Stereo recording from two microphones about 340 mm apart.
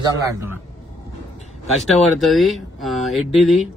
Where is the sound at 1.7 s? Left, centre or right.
Centre.